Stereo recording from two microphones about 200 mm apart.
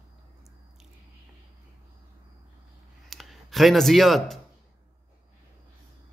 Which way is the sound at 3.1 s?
Centre (ahead or behind).